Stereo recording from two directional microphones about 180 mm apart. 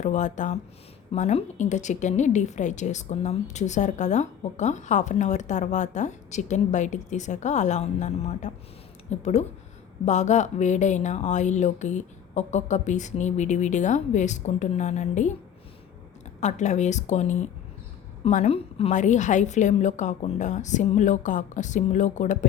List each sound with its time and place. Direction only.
0.0 s a woman's voice: 40° left (ahead or behind)
16.4 s a woman's voice: 40° left (ahead or behind)